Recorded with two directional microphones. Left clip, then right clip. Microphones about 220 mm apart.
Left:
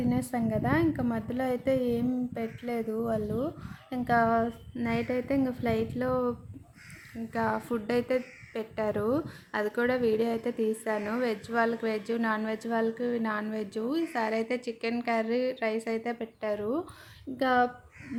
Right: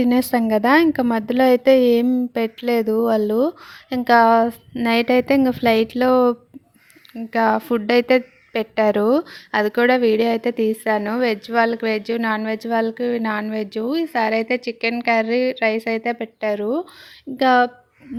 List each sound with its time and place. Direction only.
0.0 s a woman's voice: 40° right (ahead or behind)
7.3 s a woman's voice: 35° right (ahead or behind)